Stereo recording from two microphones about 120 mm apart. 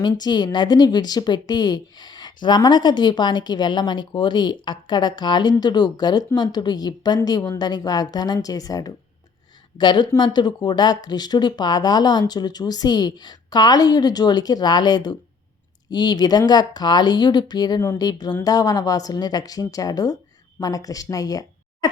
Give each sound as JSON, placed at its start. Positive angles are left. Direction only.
{"t": 0.0, "sound": "a woman's voice", "side_deg": 35}